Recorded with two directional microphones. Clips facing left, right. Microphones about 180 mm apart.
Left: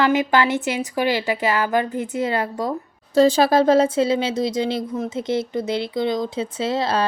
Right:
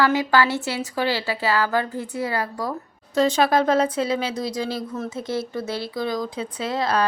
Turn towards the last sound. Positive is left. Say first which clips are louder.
# left 2 dB
turn(degrees=25)  # may be behind; listen again after turning